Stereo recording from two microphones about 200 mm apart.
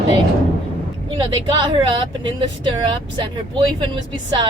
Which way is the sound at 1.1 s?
25° right (ahead or behind).